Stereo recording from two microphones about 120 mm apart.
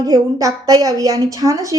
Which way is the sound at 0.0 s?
30° right (ahead or behind).